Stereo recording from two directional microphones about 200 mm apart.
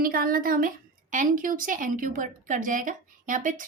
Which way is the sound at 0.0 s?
45° right (ahead or behind).